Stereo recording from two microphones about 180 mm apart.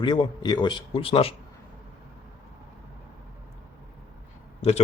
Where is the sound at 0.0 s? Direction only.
25° left (ahead or behind).